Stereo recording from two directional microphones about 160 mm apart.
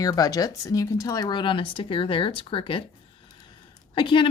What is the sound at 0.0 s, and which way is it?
A woman's voice, 25° left (ahead or behind).